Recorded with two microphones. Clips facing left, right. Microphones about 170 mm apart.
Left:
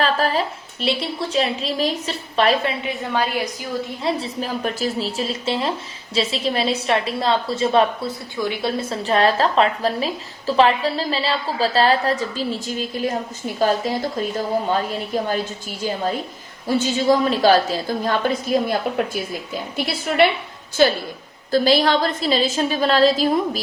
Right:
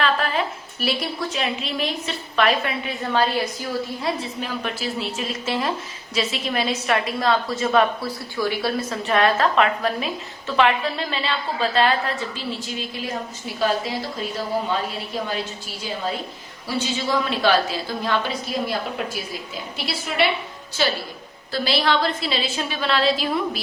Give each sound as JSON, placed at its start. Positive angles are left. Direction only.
{"t": 0.0, "sound": "a sound", "side_deg": 35}
{"t": 0.8, "sound": "a woman's voice", "side_deg": 25}
{"t": 2.8, "sound": "a woman's voice", "side_deg": 15}
{"t": 4.0, "sound": "a woman's voice", "side_deg": 35}
{"t": 16.6, "sound": "a woman's voice", "side_deg": 45}
{"t": 21.5, "sound": "a woman's voice", "side_deg": 45}